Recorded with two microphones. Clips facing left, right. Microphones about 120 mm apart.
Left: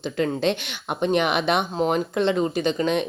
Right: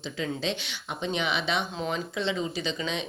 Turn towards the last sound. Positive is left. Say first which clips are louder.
# left 9 dB
turn(degrees=55)  # may be behind; listen again after turning